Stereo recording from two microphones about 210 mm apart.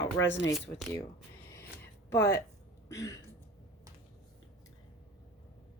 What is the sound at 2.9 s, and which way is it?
Speech, 15° left (ahead or behind).